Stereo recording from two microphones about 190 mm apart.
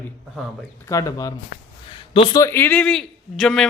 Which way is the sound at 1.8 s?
25° left (ahead or behind).